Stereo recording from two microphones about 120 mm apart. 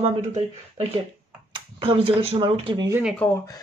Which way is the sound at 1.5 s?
50° right (ahead or behind).